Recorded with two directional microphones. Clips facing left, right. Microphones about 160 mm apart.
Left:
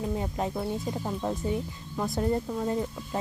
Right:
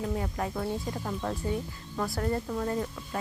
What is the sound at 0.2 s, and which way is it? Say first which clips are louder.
Speech: left 2 dB; 20° left (ahead or behind).